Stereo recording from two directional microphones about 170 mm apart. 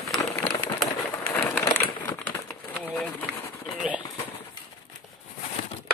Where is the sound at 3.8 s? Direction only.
5° right (ahead or behind).